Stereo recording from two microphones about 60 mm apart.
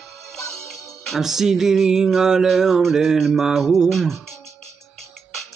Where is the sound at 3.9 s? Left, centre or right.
Centre.